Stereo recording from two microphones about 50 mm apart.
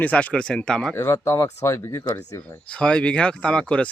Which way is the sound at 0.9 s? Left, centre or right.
Left.